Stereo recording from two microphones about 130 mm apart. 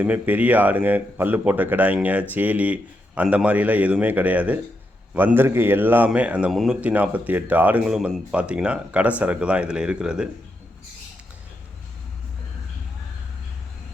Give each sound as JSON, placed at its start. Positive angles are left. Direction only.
{"t": 0.0, "sound": "speech", "side_deg": -15}